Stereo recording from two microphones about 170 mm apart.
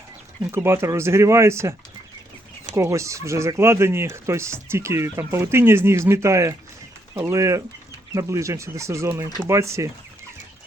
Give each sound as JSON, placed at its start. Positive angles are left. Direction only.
{"t": 0.5, "sound": "speech", "side_deg": -15}
{"t": 2.7, "sound": "speech", "side_deg": -15}